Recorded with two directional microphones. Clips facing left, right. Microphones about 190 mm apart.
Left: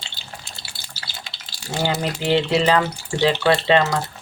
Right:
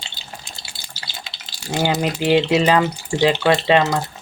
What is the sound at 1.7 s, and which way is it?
Speech, 15° right (ahead or behind).